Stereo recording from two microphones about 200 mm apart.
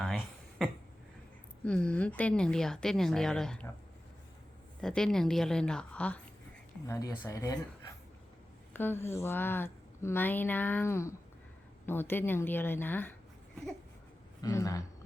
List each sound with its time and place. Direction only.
0.6 s a woman's voice: centre (ahead or behind)
4.8 s a woman's voice: 5° left (ahead or behind)
8.7 s a woman's voice: 10° left (ahead or behind)
14.4 s a woman's voice: 15° left (ahead or behind)